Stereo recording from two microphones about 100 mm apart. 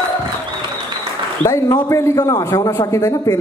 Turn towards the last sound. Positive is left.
turn(degrees=35)  # may be behind; listen again after turning